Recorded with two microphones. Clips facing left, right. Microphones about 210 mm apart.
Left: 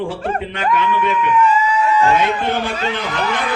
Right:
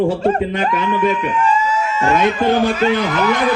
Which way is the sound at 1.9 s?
45° right (ahead or behind).